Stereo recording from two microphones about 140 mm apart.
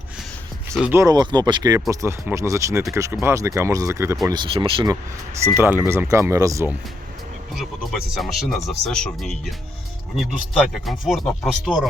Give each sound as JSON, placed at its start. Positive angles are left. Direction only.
{"t": 0.7, "sound": "speech", "side_deg": -5}
{"t": 0.9, "sound": "speech", "side_deg": -25}
{"t": 4.3, "sound": "speech", "side_deg": -35}
{"t": 5.5, "sound": "speech", "side_deg": -15}
{"t": 7.5, "sound": "speech", "side_deg": 0}
{"t": 10.8, "sound": "speech", "side_deg": 0}